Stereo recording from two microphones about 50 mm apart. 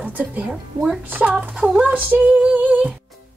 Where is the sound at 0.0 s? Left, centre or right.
Right.